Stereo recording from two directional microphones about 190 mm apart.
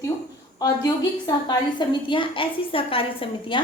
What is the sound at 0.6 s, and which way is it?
A woman's voice, 20° left (ahead or behind).